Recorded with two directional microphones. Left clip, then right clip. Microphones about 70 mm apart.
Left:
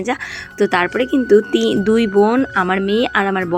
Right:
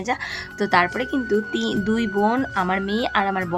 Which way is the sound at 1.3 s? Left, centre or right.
Left.